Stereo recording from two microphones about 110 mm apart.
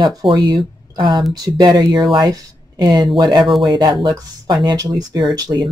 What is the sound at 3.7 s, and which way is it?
Speech, 45° right (ahead or behind).